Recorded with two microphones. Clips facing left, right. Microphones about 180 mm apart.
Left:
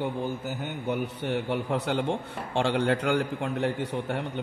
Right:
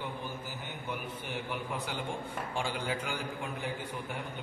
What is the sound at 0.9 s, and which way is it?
A man's voice, 80° left.